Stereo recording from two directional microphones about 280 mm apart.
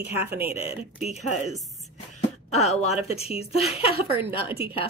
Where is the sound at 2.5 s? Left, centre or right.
Left.